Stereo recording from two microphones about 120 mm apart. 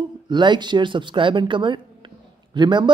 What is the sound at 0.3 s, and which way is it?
Speech, 40° right (ahead or behind).